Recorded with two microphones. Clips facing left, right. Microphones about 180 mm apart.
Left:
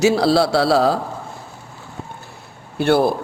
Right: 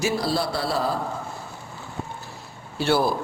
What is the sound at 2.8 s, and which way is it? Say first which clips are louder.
Speech: left 6 dB; 55° left (ahead or behind).